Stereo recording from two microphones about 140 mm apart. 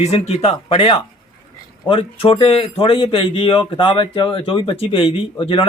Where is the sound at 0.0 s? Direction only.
50° left (ahead or behind).